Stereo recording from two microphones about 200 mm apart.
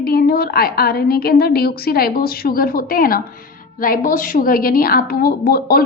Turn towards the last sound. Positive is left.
turn(degrees=50)  # may be behind; listen again after turning